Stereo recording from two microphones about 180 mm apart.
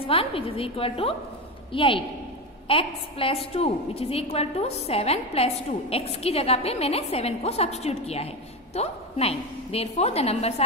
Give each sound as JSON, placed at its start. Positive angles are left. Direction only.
{"t": 0.0, "sound": "a woman's voice", "side_deg": 30}